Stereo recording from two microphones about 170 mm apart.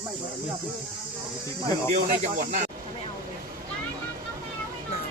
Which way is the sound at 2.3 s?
45° right (ahead or behind).